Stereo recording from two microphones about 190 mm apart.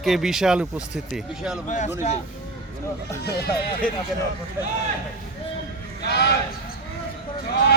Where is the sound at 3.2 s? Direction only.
55° left (ahead or behind).